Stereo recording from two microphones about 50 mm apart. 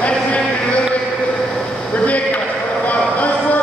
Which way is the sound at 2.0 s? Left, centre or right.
Left.